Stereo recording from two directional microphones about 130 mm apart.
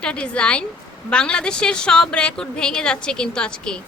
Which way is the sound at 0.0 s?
10° left (ahead or behind).